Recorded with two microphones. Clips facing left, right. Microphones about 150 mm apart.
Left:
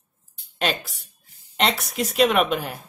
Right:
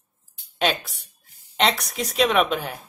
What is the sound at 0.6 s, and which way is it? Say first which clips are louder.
A woman's voice: right 2 dB; centre (ahead or behind).